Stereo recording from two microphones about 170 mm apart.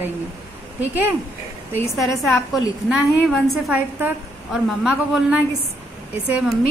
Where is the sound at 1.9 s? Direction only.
Centre (ahead or behind).